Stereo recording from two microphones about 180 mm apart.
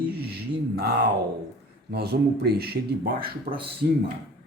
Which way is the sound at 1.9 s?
60° right (ahead or behind).